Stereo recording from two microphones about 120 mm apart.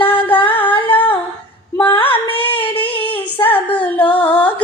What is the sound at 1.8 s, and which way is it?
Female singing, 40° left (ahead or behind).